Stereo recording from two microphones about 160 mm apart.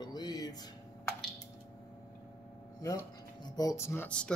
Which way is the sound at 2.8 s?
20° left (ahead or behind).